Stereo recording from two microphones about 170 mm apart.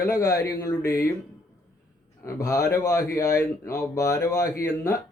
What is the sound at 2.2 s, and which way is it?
Speech, 20° left (ahead or behind).